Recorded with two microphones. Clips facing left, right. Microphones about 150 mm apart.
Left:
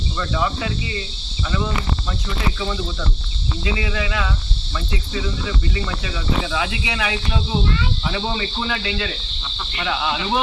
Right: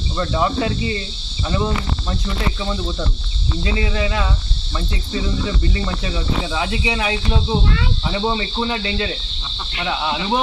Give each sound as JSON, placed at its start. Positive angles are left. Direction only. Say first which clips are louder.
{"t": 0.2, "sound": "speech", "louder": "right 4 dB", "side_deg": -30}
{"t": 3.6, "sound": "speech", "louder": "right 3 dB", "side_deg": -35}
{"t": 5.7, "sound": "speech", "louder": "right 2 dB", "side_deg": -30}